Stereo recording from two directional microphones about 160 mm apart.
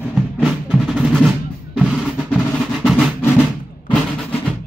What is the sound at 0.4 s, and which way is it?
Music, centre (ahead or behind).